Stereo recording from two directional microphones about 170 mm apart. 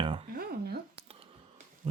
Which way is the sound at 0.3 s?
65° right (ahead or behind).